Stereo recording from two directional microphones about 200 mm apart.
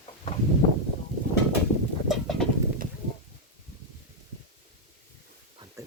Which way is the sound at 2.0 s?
Centre (ahead or behind).